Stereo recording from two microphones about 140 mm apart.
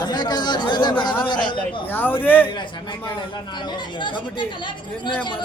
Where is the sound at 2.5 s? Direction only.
35° left (ahead or behind).